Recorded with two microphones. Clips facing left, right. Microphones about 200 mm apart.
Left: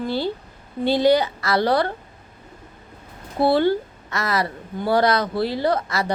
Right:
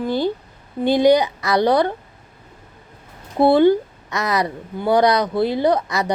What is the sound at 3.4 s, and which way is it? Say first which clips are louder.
A woman's voice: right 5 dB; 15° right (ahead or behind).